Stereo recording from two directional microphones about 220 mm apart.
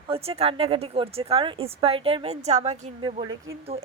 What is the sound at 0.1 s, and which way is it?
A woman's voice, 25° right (ahead or behind).